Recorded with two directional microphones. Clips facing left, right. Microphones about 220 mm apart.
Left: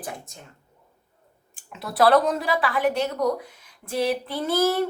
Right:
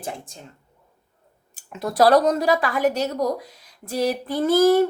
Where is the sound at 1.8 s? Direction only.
45° right (ahead or behind).